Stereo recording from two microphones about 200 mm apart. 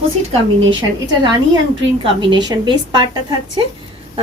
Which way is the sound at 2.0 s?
25° right (ahead or behind).